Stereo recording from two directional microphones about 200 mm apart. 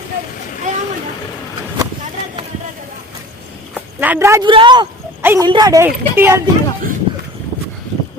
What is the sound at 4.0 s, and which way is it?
Speech, 10° right (ahead or behind).